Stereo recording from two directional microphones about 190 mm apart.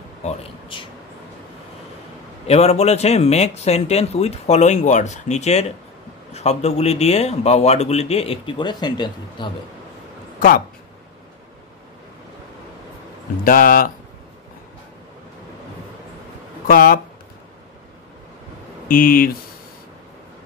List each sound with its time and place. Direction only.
0.2 s a man's voice: 35° left (ahead or behind)
2.4 s a man's voice: 35° left (ahead or behind)
13.4 s speech: 50° left (ahead or behind)
16.6 s speech: 50° left (ahead or behind)
18.9 s speech: 50° left (ahead or behind)